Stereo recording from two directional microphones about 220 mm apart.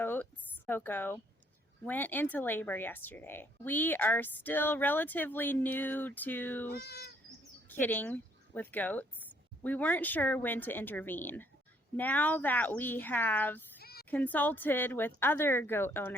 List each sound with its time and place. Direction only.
0.0 s a sound: 10° left (ahead or behind)
0.7 s speech: 10° left (ahead or behind)
6.7 s speech: 45° left (ahead or behind)
7.3 s bird: 10° left (ahead or behind)
8.7 s speech: 5° left (ahead or behind)
13.7 s a sound: 45° left (ahead or behind)
14.1 s speech: 5° left (ahead or behind)